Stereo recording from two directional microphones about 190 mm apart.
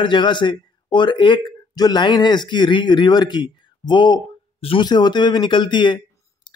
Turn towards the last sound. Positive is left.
turn(degrees=20)  # may be behind; listen again after turning